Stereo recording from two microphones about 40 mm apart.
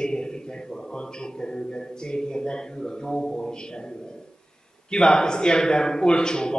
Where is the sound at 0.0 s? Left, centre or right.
Centre.